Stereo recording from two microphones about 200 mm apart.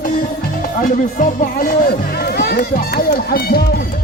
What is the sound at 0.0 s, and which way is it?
Speech, 45° left (ahead or behind).